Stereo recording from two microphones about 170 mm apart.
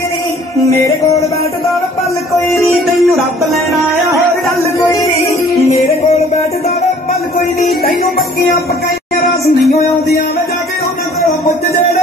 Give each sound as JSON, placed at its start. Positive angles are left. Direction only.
{"t": 3.0, "sound": "music", "side_deg": 0}
{"t": 5.7, "sound": "music", "side_deg": 40}
{"t": 7.8, "sound": "music", "side_deg": 65}